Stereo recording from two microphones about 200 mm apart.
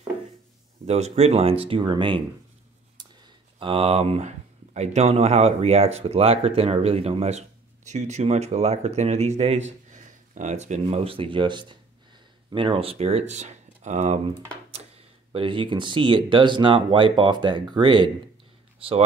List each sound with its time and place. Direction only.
0.8 s speech: 35° right (ahead or behind)
3.5 s speech: 25° right (ahead or behind)
15.3 s speech: 25° right (ahead or behind)